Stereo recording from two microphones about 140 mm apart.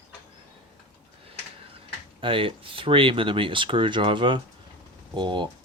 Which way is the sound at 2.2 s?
40° right (ahead or behind).